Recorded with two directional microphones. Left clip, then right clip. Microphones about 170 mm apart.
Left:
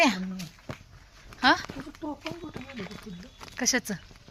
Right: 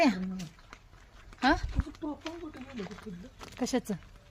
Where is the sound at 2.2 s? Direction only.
35° left (ahead or behind).